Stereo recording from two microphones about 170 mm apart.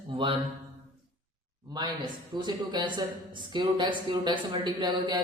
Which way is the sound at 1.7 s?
25° right (ahead or behind).